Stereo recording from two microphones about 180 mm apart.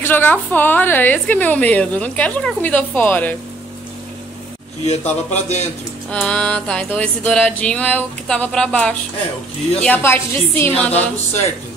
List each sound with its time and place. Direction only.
0.0 s a woman's voice: 10° left (ahead or behind)
4.8 s speech: 40° left (ahead or behind)
6.0 s a woman's voice: 5° left (ahead or behind)